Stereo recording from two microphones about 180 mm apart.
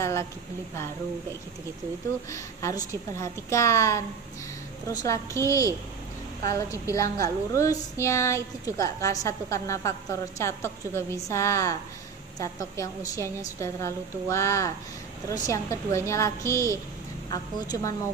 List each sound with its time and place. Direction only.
0.0 s a woman's voice: 15° left (ahead or behind)
2.3 s a woman's voice: 15° left (ahead or behind)
5.0 s a woman's voice: 15° left (ahead or behind)